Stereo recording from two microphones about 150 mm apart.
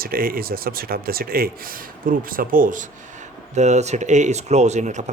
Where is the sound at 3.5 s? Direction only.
50° right (ahead or behind).